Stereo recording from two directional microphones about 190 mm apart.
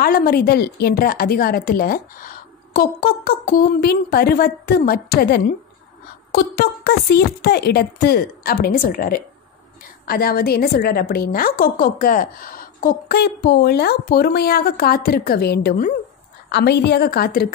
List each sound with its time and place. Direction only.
0.0 s a woman's voice: 50° left (ahead or behind)